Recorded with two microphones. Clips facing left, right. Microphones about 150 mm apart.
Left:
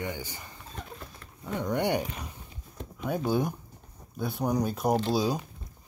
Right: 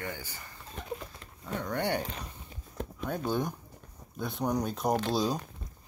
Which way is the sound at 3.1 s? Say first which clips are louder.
Left 4 dB; 10° left (ahead or behind).